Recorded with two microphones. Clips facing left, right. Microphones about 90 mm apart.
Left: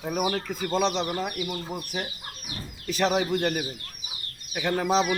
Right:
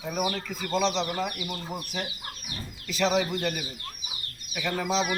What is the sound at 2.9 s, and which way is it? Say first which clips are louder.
Speech: left 1 dB; 50° left (ahead or behind).